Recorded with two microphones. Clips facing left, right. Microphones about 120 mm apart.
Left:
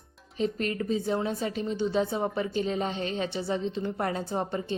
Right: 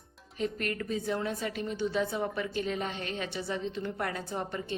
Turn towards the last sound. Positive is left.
turn(degrees=30)  # may be behind; listen again after turning